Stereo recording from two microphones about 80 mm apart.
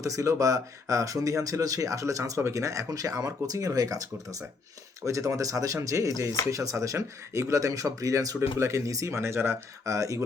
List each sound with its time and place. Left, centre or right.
0.0 s speech: right